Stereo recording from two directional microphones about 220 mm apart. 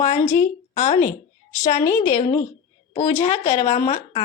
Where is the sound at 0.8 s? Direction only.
30° left (ahead or behind).